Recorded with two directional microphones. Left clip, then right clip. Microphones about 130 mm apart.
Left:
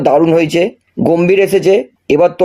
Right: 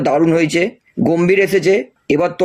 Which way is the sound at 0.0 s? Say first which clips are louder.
Left 4 dB; 25° left (ahead or behind).